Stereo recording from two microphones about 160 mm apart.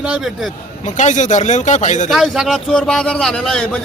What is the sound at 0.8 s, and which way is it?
Speech, 50° left (ahead or behind).